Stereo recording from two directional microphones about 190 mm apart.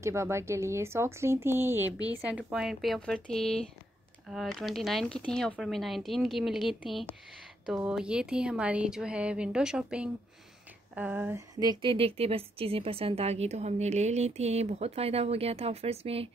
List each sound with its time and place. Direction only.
0.0 s a woman's voice: 15° right (ahead or behind); by 16.3 s 30° right (ahead or behind)